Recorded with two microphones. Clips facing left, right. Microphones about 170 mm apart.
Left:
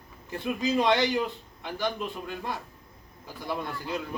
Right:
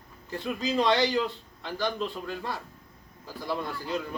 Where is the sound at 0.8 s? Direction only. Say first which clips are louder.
Right 1 dB; 20° left (ahead or behind).